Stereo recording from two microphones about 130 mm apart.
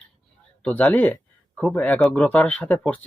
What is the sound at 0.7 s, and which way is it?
Speech, 10° left (ahead or behind).